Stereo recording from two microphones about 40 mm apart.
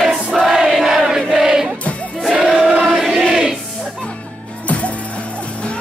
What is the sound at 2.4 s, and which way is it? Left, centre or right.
Choir, centre.